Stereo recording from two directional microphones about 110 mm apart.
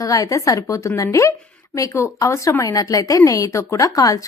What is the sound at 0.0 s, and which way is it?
Speech, 30° left (ahead or behind).